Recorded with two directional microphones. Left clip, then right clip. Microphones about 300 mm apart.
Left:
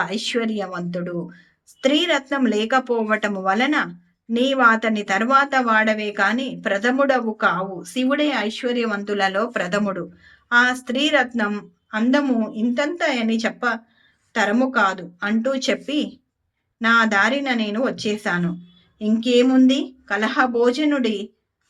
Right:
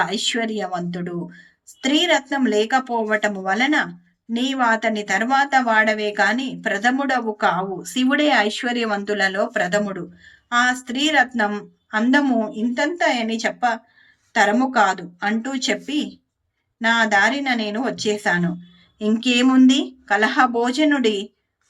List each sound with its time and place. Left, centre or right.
0.0 s speech: centre